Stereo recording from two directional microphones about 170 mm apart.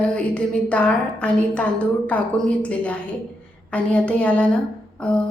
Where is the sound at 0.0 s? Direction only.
5° left (ahead or behind).